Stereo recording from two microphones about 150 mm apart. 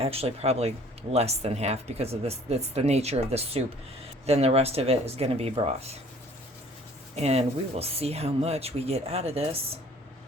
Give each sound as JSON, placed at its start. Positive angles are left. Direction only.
{"t": 0.0, "sound": "speech", "side_deg": -40}
{"t": 7.2, "sound": "speech", "side_deg": -45}